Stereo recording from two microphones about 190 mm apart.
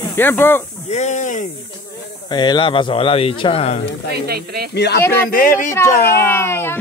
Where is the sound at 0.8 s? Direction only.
40° left (ahead or behind).